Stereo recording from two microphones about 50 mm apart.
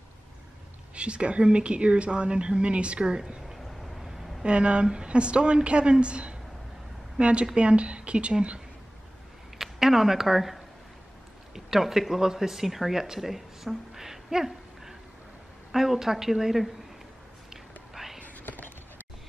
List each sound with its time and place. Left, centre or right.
0.9 s speech: right
3.4 s vehicle: centre
4.4 s speech: right
9.6 s a woman's voice: centre
17.9 s whispering: centre
18.2 s whispering: left